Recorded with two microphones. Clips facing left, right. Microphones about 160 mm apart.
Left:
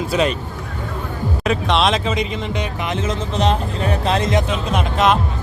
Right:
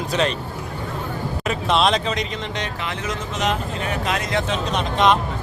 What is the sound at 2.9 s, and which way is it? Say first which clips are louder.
Speech: left 5 dB; 30° left (ahead or behind).